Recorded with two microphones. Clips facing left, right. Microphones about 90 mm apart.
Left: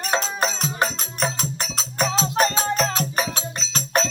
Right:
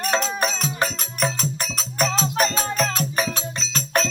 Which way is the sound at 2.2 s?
30° left (ahead or behind).